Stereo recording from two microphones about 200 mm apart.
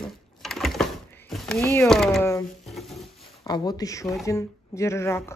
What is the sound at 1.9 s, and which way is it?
Speech, centre (ahead or behind).